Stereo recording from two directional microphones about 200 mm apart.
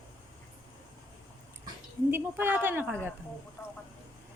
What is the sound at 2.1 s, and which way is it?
Speech, 10° right (ahead or behind).